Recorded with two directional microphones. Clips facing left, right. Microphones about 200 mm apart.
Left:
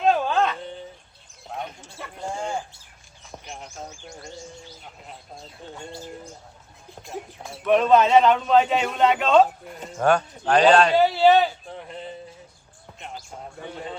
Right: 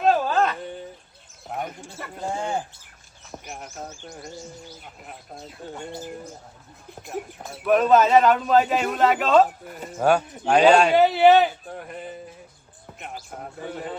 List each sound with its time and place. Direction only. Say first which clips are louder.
0.0 s a sound: right 1 dB; 5° right (ahead or behind)
3.4 s speech: right 1 dB; 5° right (ahead or behind)
5.6 s a man's voice: right 4 dB; 10° right (ahead or behind)
7.0 s a man's voice: right 3 dB; 5° right (ahead or behind)
11.0 s speech: right 2 dB; 20° right (ahead or behind)
11.9 s a sound: left 1 dB; 10° right (ahead or behind)